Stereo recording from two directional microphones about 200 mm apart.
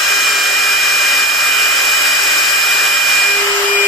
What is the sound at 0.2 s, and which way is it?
Hair dryer, centre (ahead or behind).